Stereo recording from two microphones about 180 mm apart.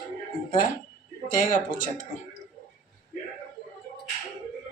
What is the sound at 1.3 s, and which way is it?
Speech, 45° left (ahead or behind).